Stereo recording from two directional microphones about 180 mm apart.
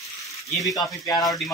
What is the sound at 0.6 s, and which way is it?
Speech, 20° left (ahead or behind).